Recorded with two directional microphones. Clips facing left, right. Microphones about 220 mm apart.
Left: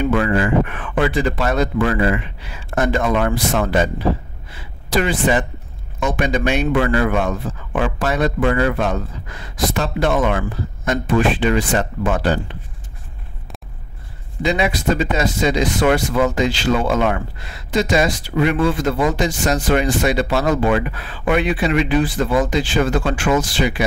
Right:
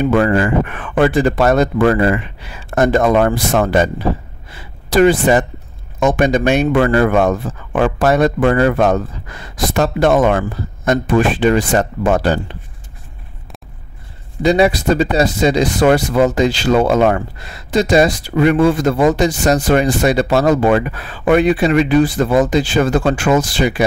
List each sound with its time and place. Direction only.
0.0 s speech: 45° right (ahead or behind)
14.4 s speech: 35° right (ahead or behind)